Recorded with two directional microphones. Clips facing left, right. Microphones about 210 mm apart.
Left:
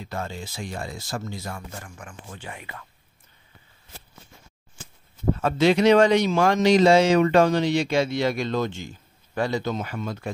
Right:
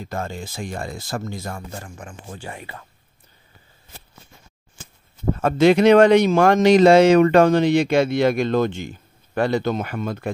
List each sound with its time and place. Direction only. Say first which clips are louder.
0.0 s speech: right 3 dB; 45° right (ahead or behind)
1.7 s speech: right 4 dB; 30° right (ahead or behind)
2.3 s speech: right 4 dB; 40° right (ahead or behind)
5.3 s speech: right 4 dB; 50° right (ahead or behind)